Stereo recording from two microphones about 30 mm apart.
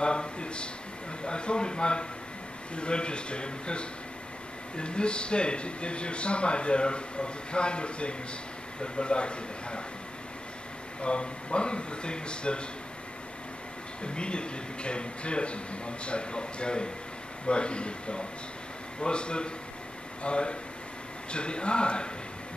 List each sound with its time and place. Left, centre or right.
0.0 s speech: left
11.0 s speech: left
14.0 s speech: left